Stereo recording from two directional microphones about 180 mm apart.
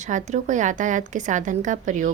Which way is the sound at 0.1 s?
45° right (ahead or behind).